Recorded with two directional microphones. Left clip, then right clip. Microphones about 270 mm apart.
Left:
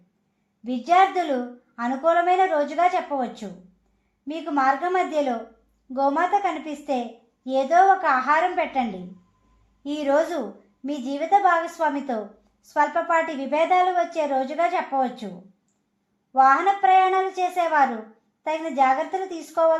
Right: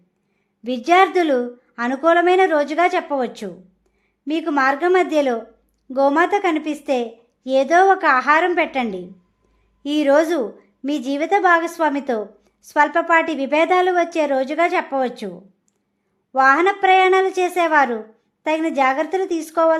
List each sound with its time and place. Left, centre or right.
0.6 s a woman's voice: right
16.3 s a woman's voice: right